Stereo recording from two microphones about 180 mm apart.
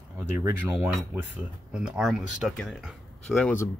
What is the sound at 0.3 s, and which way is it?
Speech, 15° right (ahead or behind).